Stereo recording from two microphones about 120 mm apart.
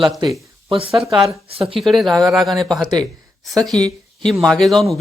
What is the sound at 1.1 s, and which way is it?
Speech, 5° right (ahead or behind).